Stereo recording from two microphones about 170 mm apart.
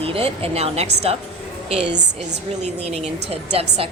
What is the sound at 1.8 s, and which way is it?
Speech, 90° right.